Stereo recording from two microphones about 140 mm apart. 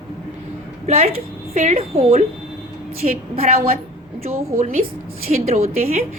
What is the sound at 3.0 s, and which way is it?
Speech, 90° right.